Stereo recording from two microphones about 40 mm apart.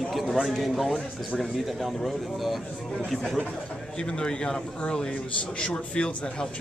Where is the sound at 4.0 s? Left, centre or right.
Left.